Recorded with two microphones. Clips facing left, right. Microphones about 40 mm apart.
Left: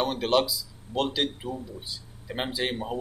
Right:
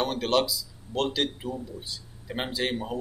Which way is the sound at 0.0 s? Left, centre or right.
Centre.